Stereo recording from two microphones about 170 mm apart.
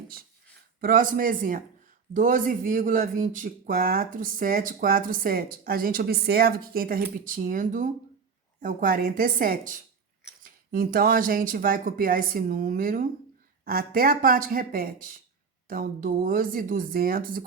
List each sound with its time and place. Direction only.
0.8 s speech: 55° right (ahead or behind)